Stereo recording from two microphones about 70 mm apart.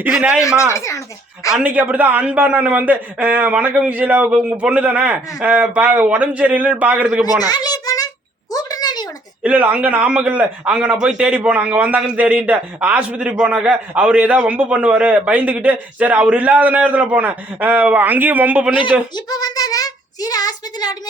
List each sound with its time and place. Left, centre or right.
0.1 s speech: centre
0.7 s speech: left
1.5 s a man's voice: right
7.3 s a child's voice: left
8.5 s a sound: left
9.4 s a man's voice: centre
19.1 s speech: left